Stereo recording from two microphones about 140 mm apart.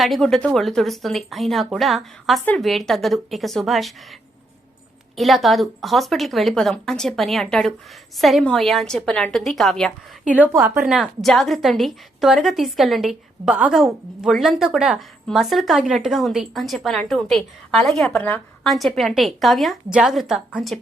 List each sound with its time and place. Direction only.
0.0 s a woman's voice: centre (ahead or behind)
5.1 s a woman's voice: centre (ahead or behind)
10.3 s a woman's voice: 10° right (ahead or behind)